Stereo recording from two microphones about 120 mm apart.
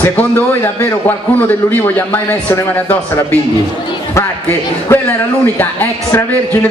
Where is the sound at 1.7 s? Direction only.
15° left (ahead or behind).